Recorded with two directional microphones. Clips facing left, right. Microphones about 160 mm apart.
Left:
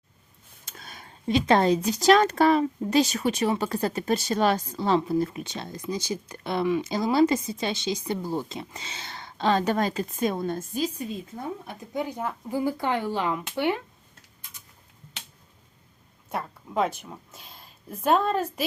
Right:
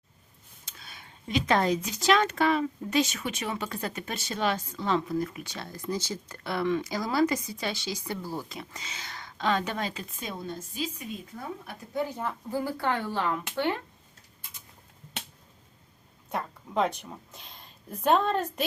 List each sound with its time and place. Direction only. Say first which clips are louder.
0.6 s speech: left 5 dB; 45° left (ahead or behind)
11.6 s speech: left 1 dB; 20° left (ahead or behind)
16.3 s speech: left 1 dB; 5° left (ahead or behind)